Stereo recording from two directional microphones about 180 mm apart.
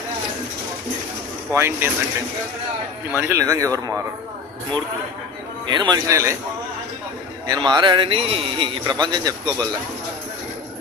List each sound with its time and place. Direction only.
1.5 s speech: 15° right (ahead or behind)
3.2 s speech: 15° right (ahead or behind)
5.6 s a man's voice: 25° right (ahead or behind)
7.4 s a man's voice: 20° right (ahead or behind)